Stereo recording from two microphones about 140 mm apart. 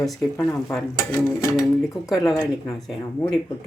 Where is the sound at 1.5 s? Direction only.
Centre (ahead or behind).